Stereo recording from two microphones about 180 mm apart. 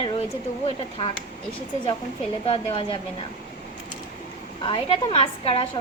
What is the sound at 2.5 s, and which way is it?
Speech, 30° left (ahead or behind).